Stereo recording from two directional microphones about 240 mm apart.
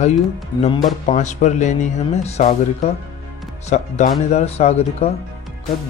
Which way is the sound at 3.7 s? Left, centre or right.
Left.